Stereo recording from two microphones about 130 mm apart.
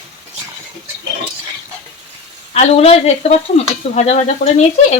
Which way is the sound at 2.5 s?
50° left (ahead or behind).